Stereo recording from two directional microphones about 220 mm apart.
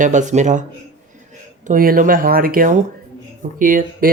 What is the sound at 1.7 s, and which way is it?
Speech, 40° right (ahead or behind).